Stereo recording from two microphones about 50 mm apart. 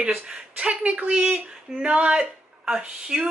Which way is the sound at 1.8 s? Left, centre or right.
Right.